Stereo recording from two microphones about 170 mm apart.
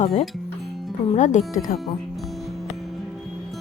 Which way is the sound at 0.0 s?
40° left (ahead or behind).